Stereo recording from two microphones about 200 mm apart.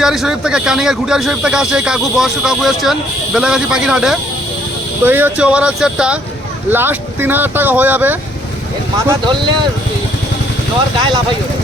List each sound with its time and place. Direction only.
0.0 s speech: centre (ahead or behind)
9.0 s speech: 20° right (ahead or behind)